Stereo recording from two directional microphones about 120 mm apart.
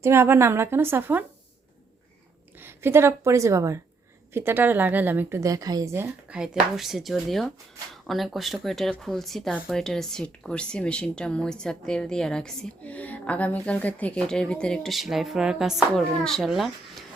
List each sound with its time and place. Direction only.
0.0 s a woman's voice: 20° right (ahead or behind)
2.6 s a woman's voice: 20° right (ahead or behind)
5.4 s speech: 30° right (ahead or behind); by 17.0 s centre (ahead or behind)